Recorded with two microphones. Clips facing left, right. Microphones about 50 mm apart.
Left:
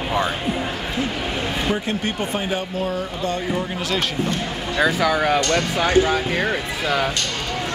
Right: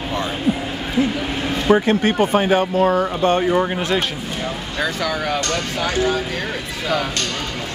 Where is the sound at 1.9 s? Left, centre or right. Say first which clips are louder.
Right 7 dB; right.